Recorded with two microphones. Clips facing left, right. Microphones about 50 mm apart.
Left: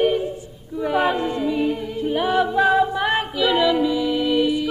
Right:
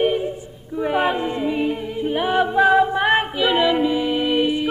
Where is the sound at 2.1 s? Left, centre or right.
Centre.